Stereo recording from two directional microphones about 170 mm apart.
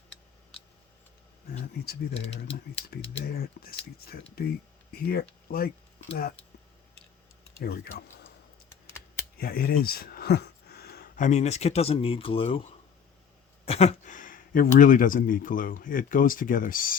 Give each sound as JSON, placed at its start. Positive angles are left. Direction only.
{"t": 1.8, "sound": "speech", "side_deg": 65}
{"t": 7.6, "sound": "speech", "side_deg": 65}
{"t": 9.4, "sound": "a sound", "side_deg": 60}
{"t": 11.3, "sound": "speech", "side_deg": 40}